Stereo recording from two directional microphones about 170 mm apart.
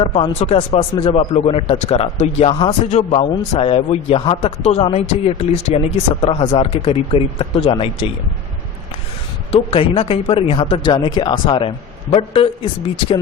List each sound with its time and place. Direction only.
0.2 s a man's voice: 35° left (ahead or behind)
9.5 s a man's voice: 35° left (ahead or behind)